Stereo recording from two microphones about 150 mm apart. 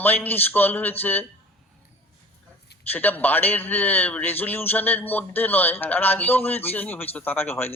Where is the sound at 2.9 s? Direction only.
10° left (ahead or behind).